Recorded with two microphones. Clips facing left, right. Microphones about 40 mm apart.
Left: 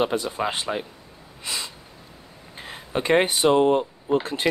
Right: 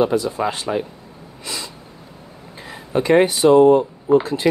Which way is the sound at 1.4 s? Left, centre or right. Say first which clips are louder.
Right 1 dB; left.